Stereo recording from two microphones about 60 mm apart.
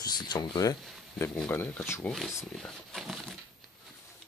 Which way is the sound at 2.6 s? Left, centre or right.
Centre.